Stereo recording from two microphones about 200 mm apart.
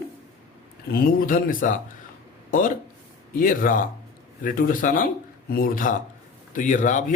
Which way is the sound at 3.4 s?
45° left (ahead or behind).